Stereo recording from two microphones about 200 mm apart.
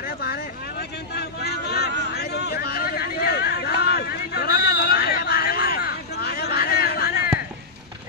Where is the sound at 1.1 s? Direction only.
55° left (ahead or behind).